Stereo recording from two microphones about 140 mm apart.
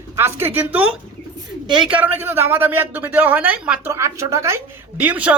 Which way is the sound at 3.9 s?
20° right (ahead or behind).